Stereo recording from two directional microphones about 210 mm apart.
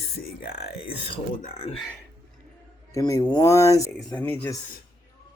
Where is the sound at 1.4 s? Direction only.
30° left (ahead or behind).